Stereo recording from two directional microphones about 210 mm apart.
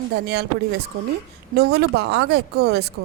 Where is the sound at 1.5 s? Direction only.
50° right (ahead or behind).